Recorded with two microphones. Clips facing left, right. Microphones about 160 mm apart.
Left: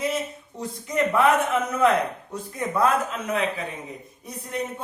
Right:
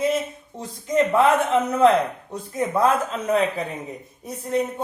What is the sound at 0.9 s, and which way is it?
Speech, 25° right (ahead or behind).